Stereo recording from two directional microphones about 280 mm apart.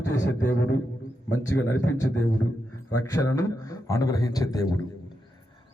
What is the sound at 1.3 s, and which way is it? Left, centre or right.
Speech, left.